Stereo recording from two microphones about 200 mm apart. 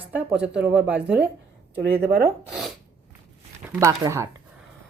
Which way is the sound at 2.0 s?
50° right (ahead or behind).